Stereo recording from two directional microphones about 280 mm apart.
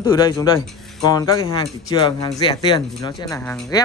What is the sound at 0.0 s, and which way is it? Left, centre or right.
Speech, centre.